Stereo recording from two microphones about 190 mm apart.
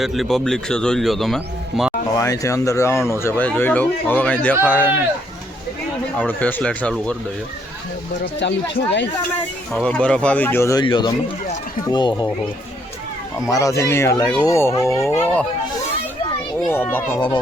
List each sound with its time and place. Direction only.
0.0 s speech: centre (ahead or behind)
2.1 s speech: 15° left (ahead or behind)
6.1 s speech: 10° left (ahead or behind)
8.2 s speech: 65° left (ahead or behind)
9.7 s speech: 5° left (ahead or behind); by 12.3 s 25° left (ahead or behind)
13.5 s speech: 15° left (ahead or behind)
16.6 s speech: 10° left (ahead or behind)